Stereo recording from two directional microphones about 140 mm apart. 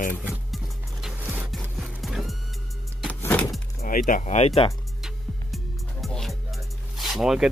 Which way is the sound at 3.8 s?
75° left (ahead or behind).